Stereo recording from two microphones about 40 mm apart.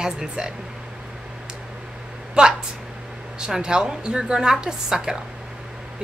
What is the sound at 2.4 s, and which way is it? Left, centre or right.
A woman's voice, right.